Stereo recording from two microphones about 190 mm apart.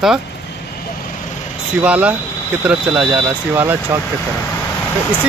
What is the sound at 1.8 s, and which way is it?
Speech, 5° right (ahead or behind).